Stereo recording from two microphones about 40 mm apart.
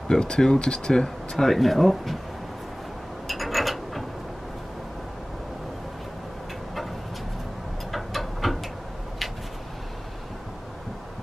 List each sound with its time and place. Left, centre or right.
0.1 s speech: centre
3.3 s mechanisms: centre
7.9 s a sound: centre